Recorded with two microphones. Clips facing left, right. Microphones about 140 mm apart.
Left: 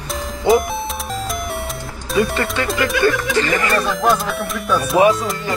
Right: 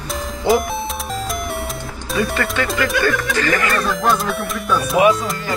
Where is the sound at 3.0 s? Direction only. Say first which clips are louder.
Left 2 dB; centre (ahead or behind).